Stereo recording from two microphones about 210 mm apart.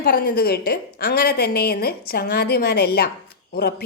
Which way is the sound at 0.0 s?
50° left (ahead or behind).